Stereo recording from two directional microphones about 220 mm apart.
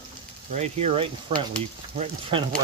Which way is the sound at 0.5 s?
30° right (ahead or behind).